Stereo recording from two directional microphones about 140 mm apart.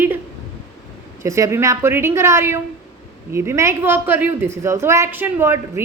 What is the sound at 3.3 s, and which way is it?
A woman's voice, 20° right (ahead or behind).